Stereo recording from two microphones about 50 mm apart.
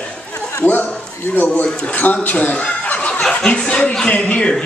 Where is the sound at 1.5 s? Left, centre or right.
Left.